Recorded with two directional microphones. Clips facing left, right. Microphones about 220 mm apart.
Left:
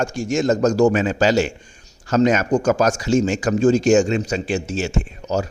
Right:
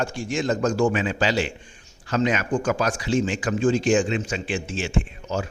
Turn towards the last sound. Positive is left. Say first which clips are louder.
# left 5 dB
turn(degrees=40)  # may be behind; listen again after turning